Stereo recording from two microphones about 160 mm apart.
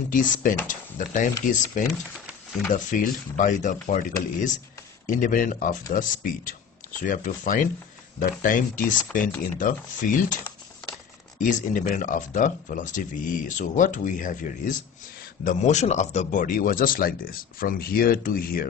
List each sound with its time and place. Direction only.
0.1 s speech: 55° left (ahead or behind)
5.0 s speech: 55° left (ahead or behind)